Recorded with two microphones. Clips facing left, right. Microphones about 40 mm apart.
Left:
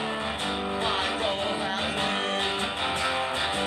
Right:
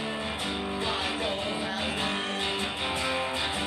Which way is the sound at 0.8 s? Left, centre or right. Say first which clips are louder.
Left 3 dB; left.